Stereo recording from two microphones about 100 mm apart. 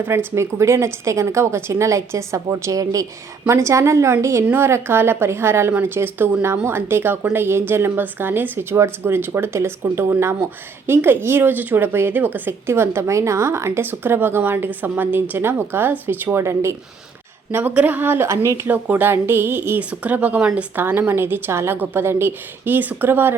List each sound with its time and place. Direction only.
0.0 s speech: 20° right (ahead or behind)